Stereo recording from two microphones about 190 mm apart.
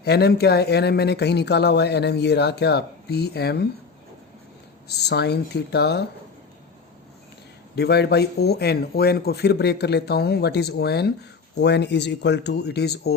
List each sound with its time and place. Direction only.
0.0 s speech: 60° left (ahead or behind)
4.9 s speech: 60° left (ahead or behind)
7.8 s speech: 60° left (ahead or behind)